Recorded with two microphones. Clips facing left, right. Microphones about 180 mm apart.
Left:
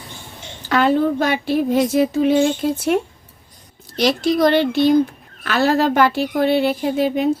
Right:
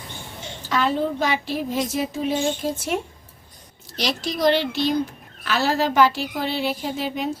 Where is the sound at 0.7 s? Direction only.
60° left (ahead or behind).